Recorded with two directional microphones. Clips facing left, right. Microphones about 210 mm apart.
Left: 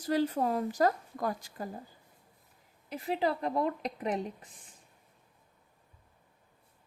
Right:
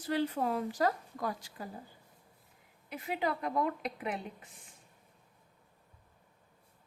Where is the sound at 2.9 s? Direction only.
35° left (ahead or behind).